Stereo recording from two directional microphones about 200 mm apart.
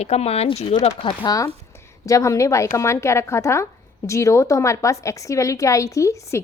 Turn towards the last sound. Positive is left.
turn(degrees=15)  # may be behind; listen again after turning